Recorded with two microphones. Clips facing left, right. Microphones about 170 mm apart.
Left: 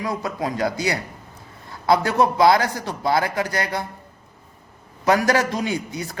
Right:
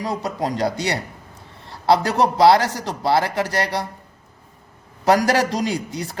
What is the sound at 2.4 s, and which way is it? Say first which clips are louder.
Speech: right 5 dB; 35° right (ahead or behind).